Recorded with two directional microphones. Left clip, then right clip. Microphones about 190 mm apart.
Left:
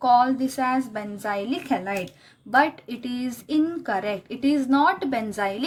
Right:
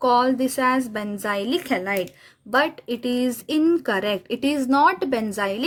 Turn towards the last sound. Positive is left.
turn(degrees=-45)  # may be behind; listen again after turning